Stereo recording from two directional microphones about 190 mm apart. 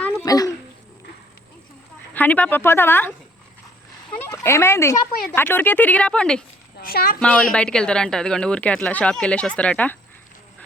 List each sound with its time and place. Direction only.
0.3 s babbling: 20° left (ahead or behind)
2.1 s speech: 10° left (ahead or behind)
4.2 s speech: 15° left (ahead or behind)
6.8 s speech: 50° left (ahead or behind)
7.2 s a woman's voice: 5° left (ahead or behind)